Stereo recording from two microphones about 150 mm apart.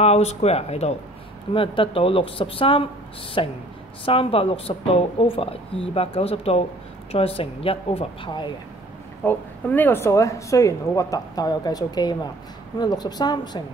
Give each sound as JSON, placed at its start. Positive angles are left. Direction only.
{"t": 0.0, "sound": "a woman's voice", "side_deg": 45}
{"t": 9.2, "sound": "speech", "side_deg": 10}